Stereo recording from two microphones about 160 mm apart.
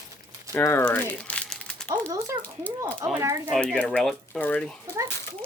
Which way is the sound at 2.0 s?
20° right (ahead or behind).